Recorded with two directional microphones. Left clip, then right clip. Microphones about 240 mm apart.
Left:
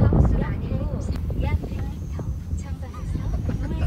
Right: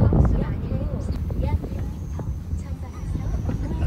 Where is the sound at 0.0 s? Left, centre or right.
Centre.